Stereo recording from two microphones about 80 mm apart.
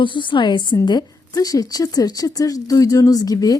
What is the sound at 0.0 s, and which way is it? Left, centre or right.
A woman's voice, left.